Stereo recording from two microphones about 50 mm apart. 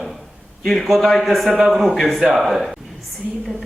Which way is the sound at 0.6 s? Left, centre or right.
Centre.